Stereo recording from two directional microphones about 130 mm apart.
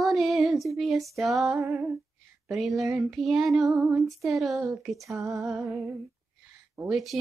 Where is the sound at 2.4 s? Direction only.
Centre (ahead or behind).